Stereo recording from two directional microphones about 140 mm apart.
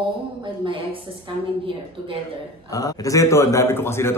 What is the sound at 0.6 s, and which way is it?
Speech, 40° right (ahead or behind).